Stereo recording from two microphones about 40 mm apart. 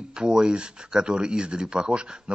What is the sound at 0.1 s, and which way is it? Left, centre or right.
Speech, centre.